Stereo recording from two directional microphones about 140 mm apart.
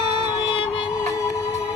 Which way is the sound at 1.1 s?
20° left (ahead or behind).